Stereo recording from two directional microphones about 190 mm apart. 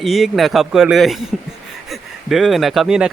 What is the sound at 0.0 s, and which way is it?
A man's voice, centre (ahead or behind).